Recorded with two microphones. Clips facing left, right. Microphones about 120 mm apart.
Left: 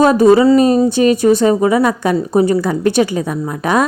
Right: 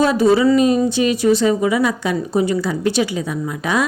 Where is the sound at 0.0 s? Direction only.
45° left (ahead or behind).